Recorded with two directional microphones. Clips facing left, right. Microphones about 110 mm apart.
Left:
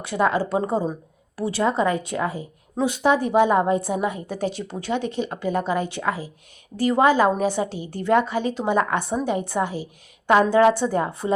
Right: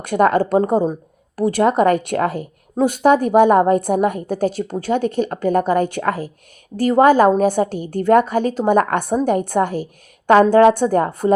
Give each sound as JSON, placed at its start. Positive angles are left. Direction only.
{"t": 0.0, "sound": "a woman's voice", "side_deg": -55}
{"t": 2.7, "sound": "a woman's voice", "side_deg": -45}